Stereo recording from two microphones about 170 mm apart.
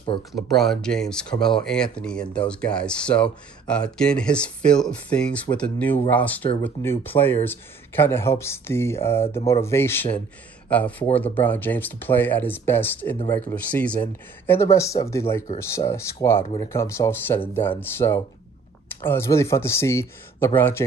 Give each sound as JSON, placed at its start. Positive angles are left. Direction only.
{"t": 0.3, "sound": "speech", "side_deg": 0}